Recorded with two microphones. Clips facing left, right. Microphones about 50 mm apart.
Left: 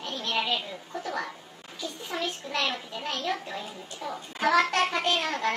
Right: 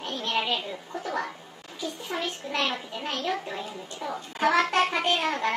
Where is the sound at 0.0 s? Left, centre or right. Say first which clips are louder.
Right 1 dB; right.